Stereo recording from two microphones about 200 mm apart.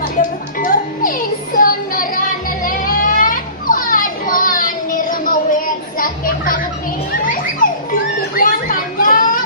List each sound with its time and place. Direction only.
0.2 s music: 40° left (ahead or behind)
1.5 s child singing: 45° left (ahead or behind)
2.6 s children playing: 45° left (ahead or behind)
8.4 s children playing: 45° left (ahead or behind)